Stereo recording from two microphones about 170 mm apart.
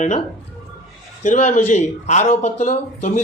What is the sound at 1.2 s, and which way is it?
A man's voice, 45° left (ahead or behind).